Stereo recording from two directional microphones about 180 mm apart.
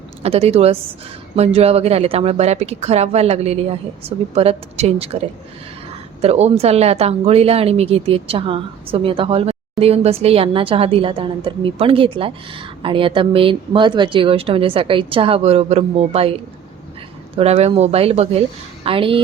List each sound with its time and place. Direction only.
0.2 s speech: 35° right (ahead or behind)
6.2 s speech: 35° right (ahead or behind)